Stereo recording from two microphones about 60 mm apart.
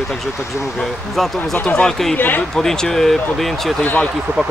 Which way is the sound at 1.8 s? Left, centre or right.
Centre.